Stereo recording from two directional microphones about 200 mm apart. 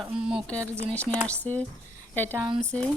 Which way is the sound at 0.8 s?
5° left (ahead or behind).